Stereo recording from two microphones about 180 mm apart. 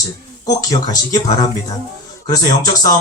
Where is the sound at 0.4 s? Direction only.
20° left (ahead or behind).